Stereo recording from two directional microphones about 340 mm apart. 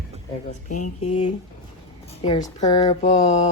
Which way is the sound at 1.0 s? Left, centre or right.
Centre.